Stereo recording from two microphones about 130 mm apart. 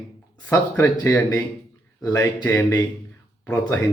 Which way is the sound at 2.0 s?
30° left (ahead or behind).